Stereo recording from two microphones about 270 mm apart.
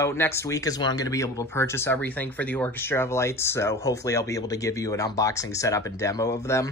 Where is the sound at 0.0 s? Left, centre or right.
Centre.